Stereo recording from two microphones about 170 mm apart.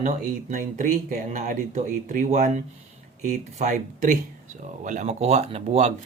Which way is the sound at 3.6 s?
50° right (ahead or behind).